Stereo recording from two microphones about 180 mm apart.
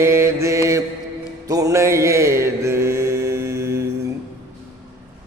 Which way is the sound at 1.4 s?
20° right (ahead or behind).